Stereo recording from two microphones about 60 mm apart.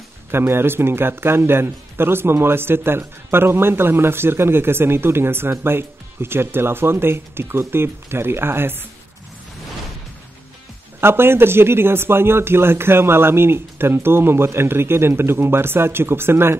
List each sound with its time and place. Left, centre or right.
0.3 s speech: right
11.0 s speech: right